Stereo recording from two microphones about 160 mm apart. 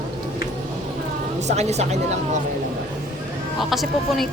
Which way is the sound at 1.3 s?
45° right (ahead or behind).